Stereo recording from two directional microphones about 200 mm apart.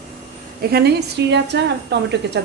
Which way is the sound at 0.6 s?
50° right (ahead or behind).